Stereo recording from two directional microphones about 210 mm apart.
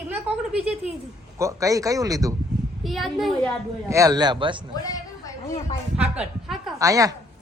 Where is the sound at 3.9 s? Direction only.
15° right (ahead or behind).